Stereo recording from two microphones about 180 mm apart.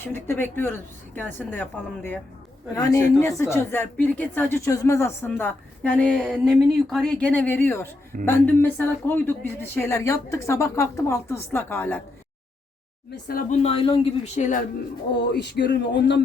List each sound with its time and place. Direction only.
0.0 s a woman's voice: 10° left (ahead or behind)
13.5 s speech: 35° left (ahead or behind)
15.1 s speech: 70° left (ahead or behind)